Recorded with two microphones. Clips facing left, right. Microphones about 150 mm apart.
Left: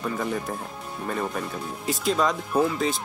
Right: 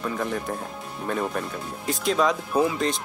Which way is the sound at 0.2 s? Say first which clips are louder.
Even; 5° left (ahead or behind).